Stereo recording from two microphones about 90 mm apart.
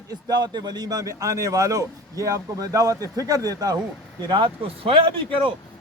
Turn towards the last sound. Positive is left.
turn(degrees=-75)  # may be behind; listen again after turning